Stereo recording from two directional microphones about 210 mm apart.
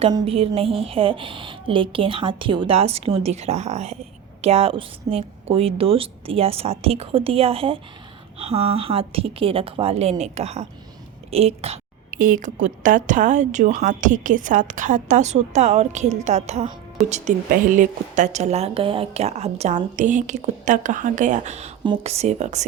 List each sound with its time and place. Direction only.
0.0 s a woman's voice: 25° right (ahead or behind)